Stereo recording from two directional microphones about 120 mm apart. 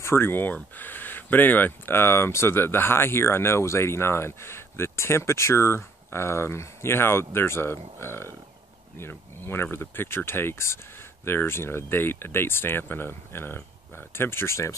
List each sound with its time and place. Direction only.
0.0 s speech: 20° left (ahead or behind)